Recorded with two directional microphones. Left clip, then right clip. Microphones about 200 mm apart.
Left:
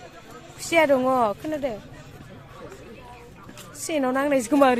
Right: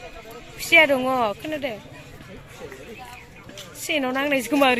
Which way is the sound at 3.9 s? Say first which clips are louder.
Even; 20° left (ahead or behind).